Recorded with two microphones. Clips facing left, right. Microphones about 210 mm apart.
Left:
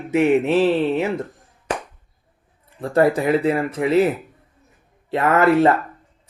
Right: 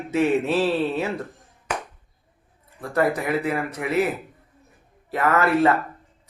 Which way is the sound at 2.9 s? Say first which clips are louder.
Left 5 dB; 30° left (ahead or behind).